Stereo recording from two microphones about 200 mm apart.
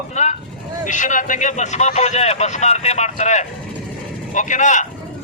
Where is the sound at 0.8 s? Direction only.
40° left (ahead or behind).